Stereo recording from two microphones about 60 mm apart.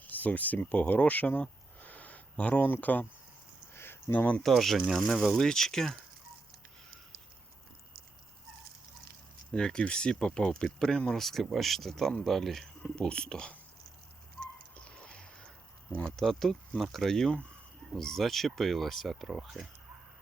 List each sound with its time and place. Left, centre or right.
0.0 s speech: left
3.8 s a sound: left
4.1 s speech: left
4.4 s speech: centre
9.5 s speech: centre
14.8 s a sound: centre
16.0 s speech: centre